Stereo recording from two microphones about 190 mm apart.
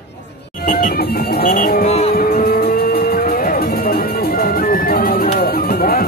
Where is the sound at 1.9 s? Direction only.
35° left (ahead or behind).